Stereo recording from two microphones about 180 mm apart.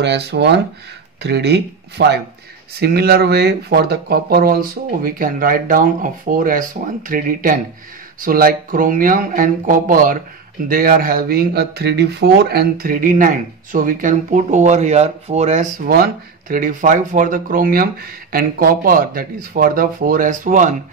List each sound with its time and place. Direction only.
0.0 s speech: 70° right (ahead or behind); by 20.7 s 45° right (ahead or behind)